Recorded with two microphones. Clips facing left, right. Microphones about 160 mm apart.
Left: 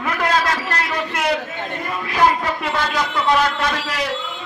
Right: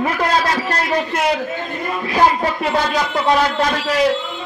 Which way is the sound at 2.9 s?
40° right (ahead or behind).